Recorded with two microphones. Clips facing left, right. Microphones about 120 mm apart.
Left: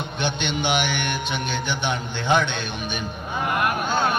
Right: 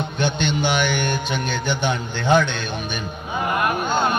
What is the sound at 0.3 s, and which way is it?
Music, 40° right (ahead or behind).